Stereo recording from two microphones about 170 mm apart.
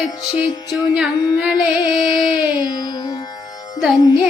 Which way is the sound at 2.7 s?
20° left (ahead or behind).